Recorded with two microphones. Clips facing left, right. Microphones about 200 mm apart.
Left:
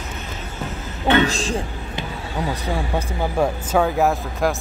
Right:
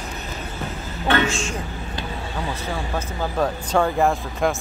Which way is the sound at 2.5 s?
15° left (ahead or behind).